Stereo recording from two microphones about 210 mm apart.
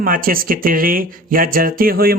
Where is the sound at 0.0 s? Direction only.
45° right (ahead or behind).